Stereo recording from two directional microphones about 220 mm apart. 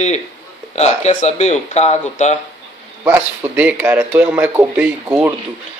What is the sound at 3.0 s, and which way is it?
Speech, 10° right (ahead or behind).